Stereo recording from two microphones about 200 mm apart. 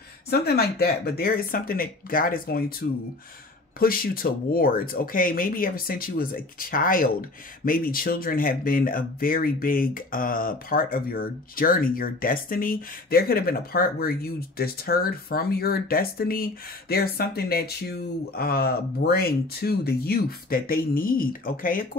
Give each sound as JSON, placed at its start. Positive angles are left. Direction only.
{"t": 0.3, "sound": "speech", "side_deg": 50}